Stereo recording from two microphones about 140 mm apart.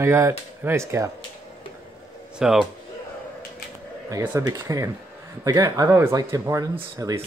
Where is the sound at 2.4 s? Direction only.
5° right (ahead or behind).